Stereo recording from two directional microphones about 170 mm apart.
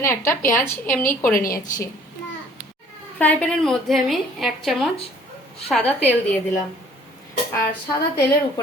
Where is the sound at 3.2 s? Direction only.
5° left (ahead or behind).